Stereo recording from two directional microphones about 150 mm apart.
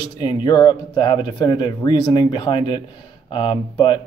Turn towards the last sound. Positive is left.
turn(degrees=35)  # may be behind; listen again after turning